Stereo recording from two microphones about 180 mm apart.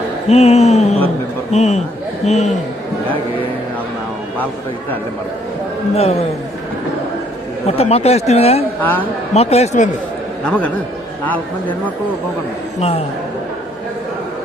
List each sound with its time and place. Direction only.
0.3 s speech: 35° left (ahead or behind)
5.9 s speech: 35° left (ahead or behind)
7.7 s speech: 35° left (ahead or behind)
8.8 s a man's voice: 10° left (ahead or behind)
9.3 s speech: 35° left (ahead or behind)
10.4 s a man's voice: 5° left (ahead or behind)